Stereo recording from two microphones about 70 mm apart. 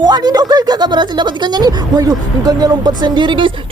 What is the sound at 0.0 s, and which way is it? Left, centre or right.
Speech, right.